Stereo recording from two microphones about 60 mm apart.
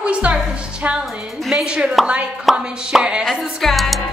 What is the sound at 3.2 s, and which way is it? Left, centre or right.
Music, centre.